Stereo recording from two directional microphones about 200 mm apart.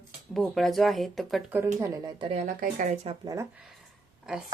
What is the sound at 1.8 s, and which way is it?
Speech, 15° right (ahead or behind).